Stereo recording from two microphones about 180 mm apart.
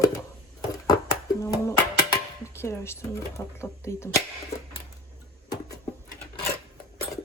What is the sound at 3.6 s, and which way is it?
Speech, 15° left (ahead or behind).